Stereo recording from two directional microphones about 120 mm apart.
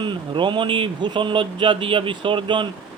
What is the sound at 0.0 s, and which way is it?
Speech, 40° right (ahead or behind).